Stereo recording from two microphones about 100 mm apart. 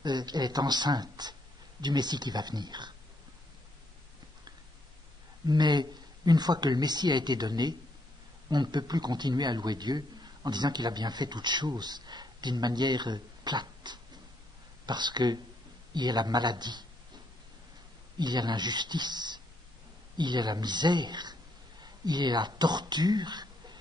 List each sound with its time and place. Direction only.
0.0 s a man's voice: 45° right (ahead or behind)
5.5 s a man's voice: 45° right (ahead or behind)
18.1 s a man's voice: 45° right (ahead or behind)